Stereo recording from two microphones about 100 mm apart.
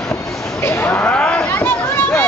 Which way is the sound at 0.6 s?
20° left (ahead or behind).